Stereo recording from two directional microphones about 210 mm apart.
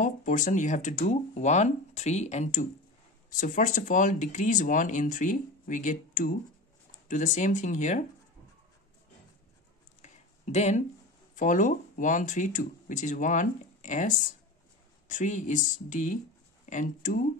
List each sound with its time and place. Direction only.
0.0 s speech: 35° left (ahead or behind)
10.0 s a sound: 35° left (ahead or behind)
11.3 s speech: 35° left (ahead or behind)